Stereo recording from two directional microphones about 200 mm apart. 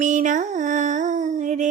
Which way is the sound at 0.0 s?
40° right (ahead or behind).